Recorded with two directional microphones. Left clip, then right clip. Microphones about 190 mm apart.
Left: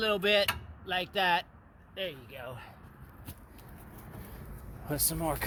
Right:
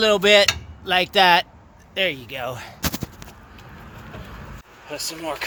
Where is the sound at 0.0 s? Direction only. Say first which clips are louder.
Right 12 dB; 20° right (ahead or behind).